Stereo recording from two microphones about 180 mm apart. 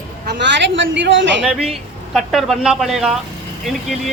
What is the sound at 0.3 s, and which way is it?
A woman's voice, 75° right (ahead or behind).